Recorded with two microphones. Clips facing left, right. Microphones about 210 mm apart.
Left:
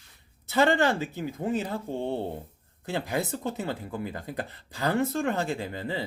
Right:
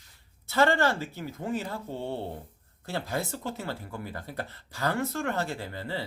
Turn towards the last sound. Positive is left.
turn(degrees=15)  # may be behind; listen again after turning